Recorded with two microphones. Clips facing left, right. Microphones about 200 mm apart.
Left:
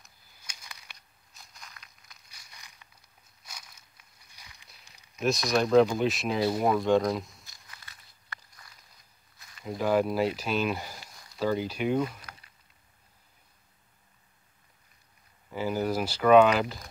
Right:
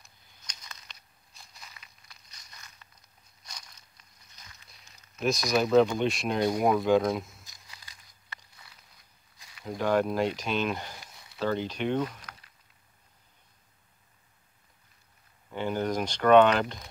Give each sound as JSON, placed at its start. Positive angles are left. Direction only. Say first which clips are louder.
{"t": 0.0, "sound": "a sound", "louder": "even", "side_deg": 10}
{"t": 0.9, "sound": "walk", "louder": "even", "side_deg": 0}
{"t": 5.2, "sound": "speech", "louder": "even", "side_deg": 0}
{"t": 9.7, "sound": "speech", "louder": "left 1 dB", "side_deg": 5}
{"t": 15.5, "sound": "speech", "louder": "left 1 dB", "side_deg": 5}